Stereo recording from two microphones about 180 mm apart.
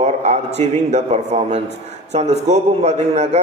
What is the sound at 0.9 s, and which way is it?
A man's voice, 40° right (ahead or behind).